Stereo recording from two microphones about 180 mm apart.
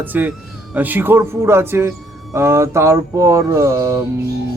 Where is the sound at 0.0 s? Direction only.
10° right (ahead or behind).